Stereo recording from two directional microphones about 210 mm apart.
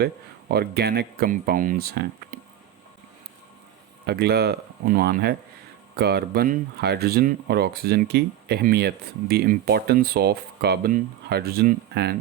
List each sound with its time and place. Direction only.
0.0 s speech: 45° right (ahead or behind)
4.0 s speech: 50° right (ahead or behind)